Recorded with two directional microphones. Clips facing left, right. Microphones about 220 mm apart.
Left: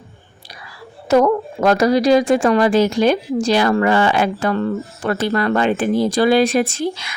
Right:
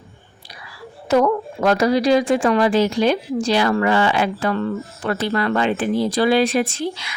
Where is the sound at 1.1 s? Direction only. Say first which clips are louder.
Left 3 dB; 45° left (ahead or behind).